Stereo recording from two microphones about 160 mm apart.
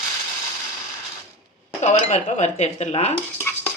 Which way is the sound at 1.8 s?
45° left (ahead or behind).